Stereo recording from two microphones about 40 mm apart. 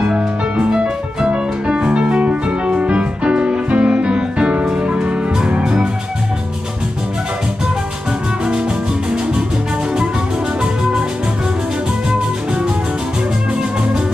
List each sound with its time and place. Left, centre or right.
0.7 s music: right